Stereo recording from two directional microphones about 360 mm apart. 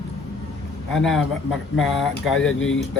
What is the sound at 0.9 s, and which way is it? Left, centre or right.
Speech, centre.